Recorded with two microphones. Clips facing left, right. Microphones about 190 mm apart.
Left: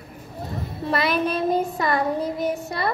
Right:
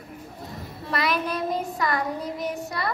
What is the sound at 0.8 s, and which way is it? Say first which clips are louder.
Child singing: left 4 dB; 25° left (ahead or behind).